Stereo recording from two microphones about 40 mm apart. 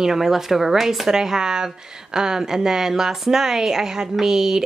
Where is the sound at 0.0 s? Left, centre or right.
Centre.